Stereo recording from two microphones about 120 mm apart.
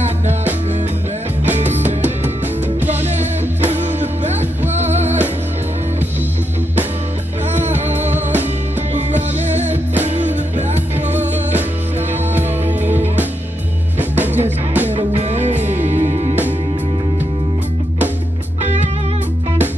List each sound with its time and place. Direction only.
1.6 s music: 70° right (ahead or behind)
2.8 s music: 15° right (ahead or behind)
3.2 s music: 70° right (ahead or behind)
7.5 s music: 70° right (ahead or behind)
13.0 s music: 15° right (ahead or behind)
15.1 s music: 70° right (ahead or behind)
18.6 s music: 70° right (ahead or behind)